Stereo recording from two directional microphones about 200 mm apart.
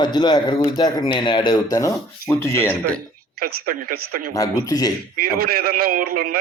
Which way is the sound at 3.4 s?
50° right (ahead or behind).